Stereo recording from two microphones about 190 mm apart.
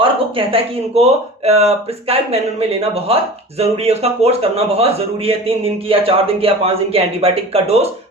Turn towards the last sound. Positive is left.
turn(degrees=-30)  # may be behind; listen again after turning